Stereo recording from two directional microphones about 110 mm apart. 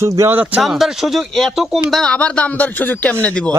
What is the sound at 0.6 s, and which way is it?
Speech, centre (ahead or behind).